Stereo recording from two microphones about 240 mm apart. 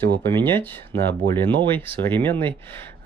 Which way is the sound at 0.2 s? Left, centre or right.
Centre.